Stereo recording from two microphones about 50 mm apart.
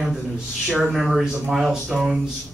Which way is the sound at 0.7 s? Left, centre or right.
Centre.